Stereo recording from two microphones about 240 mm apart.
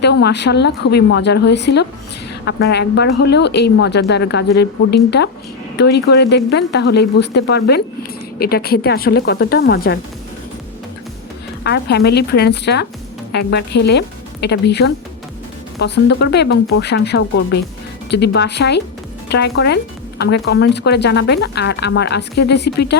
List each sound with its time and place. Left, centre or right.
0.0 s a woman's voice: left
11.6 s speech: left